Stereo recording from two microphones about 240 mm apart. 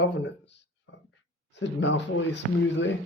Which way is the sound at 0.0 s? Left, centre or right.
Left.